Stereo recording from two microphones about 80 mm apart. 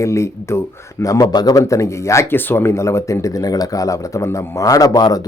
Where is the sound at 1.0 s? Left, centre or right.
Left.